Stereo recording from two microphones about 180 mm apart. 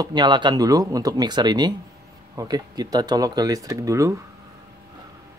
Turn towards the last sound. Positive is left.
turn(degrees=-15)  # may be behind; listen again after turning